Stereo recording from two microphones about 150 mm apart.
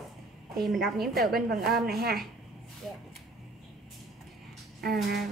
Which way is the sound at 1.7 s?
90° right.